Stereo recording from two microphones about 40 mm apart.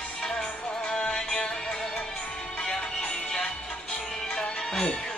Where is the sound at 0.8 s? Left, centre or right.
Centre.